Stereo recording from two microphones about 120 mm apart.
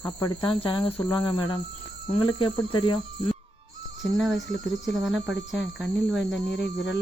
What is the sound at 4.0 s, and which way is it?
Speech, centre (ahead or behind).